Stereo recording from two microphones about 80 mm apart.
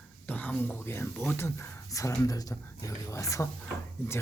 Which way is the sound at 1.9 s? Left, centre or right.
Left.